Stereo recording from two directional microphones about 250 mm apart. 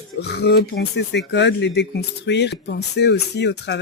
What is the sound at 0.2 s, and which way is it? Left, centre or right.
Speech, left.